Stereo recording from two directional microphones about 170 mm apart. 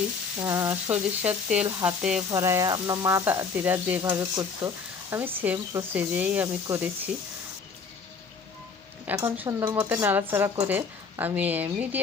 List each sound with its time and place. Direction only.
0.3 s speech: 20° right (ahead or behind)
2.0 s speech: 5° right (ahead or behind)
2.3 s speech: 20° right (ahead or behind)
9.0 s speech: 10° right (ahead or behind)